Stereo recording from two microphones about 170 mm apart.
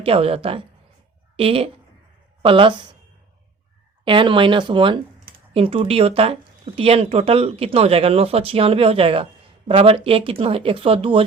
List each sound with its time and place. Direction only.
0.0 s speech: 35° right (ahead or behind)
4.0 s speech: 30° right (ahead or behind)